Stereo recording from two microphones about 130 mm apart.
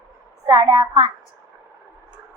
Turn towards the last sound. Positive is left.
turn(degrees=-35)  # may be behind; listen again after turning